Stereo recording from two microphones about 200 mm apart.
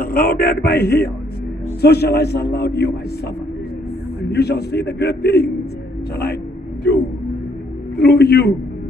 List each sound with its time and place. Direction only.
0.0 s a man's voice: 50° left (ahead or behind)
4.3 s a man's voice: 55° left (ahead or behind)
8.0 s a man's voice: 55° left (ahead or behind)